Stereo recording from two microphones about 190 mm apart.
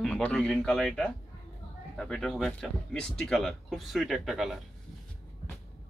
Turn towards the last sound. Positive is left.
turn(degrees=0)  # may be behind; listen again after turning